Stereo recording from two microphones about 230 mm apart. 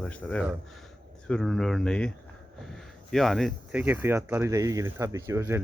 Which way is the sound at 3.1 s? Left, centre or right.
Centre.